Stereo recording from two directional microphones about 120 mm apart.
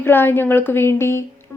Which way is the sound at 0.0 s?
20° left (ahead or behind).